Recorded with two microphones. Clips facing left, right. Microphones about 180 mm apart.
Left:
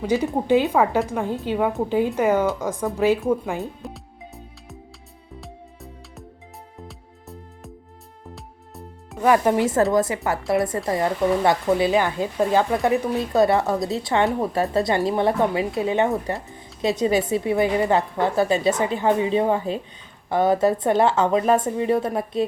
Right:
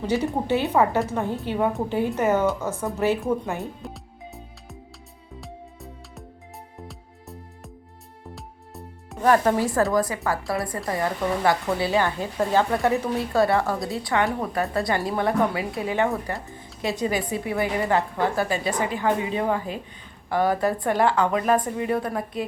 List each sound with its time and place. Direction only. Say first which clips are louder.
0.4 s a woman's voice: left 4 dB; 15° left (ahead or behind)
3.6 s music: left 2 dB; centre (ahead or behind)
9.2 s a woman's voice: left 2 dB; 15° left (ahead or behind)